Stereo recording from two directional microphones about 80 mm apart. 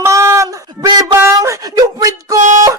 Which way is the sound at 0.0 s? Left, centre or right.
Right.